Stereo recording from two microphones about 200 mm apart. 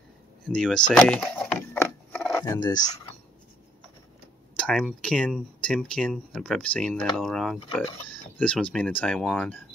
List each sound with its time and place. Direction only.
0.5 s a sound: 5° left (ahead or behind)
2.4 s speech: 20° left (ahead or behind)
4.6 s speech: 5° left (ahead or behind)